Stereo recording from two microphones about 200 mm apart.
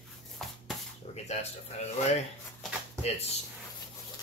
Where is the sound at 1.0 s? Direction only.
30° left (ahead or behind).